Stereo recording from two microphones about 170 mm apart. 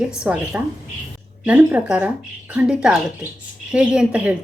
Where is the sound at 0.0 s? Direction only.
5° right (ahead or behind).